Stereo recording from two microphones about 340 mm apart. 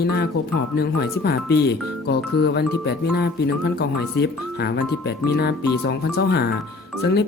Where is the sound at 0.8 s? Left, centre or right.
Left.